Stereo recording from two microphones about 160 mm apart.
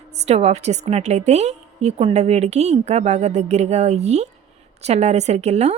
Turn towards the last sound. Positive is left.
turn(degrees=-40)  # may be behind; listen again after turning